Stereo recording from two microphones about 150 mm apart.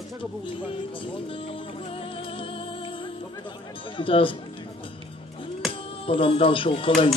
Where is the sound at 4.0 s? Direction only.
35° left (ahead or behind).